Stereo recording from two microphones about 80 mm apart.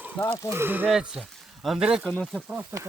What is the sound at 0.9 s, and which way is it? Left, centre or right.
Speech, centre.